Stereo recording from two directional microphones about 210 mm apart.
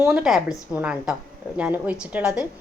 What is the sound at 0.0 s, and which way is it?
A woman's voice, 5° right (ahead or behind).